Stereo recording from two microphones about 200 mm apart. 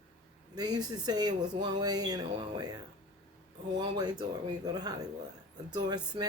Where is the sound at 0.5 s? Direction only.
20° right (ahead or behind).